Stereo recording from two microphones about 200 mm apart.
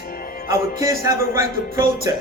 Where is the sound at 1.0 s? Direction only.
15° right (ahead or behind).